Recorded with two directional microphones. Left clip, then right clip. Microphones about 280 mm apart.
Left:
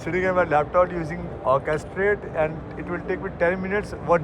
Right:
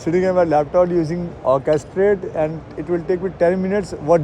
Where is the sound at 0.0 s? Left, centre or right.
Right.